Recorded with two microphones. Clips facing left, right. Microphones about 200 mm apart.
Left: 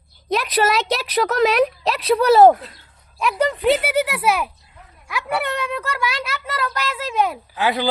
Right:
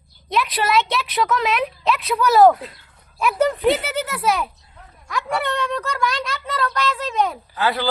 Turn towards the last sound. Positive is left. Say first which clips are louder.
# left 1 dB
turn(degrees=15)  # may be behind; listen again after turning